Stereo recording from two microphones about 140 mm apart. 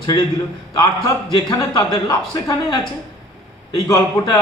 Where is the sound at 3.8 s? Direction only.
25° left (ahead or behind).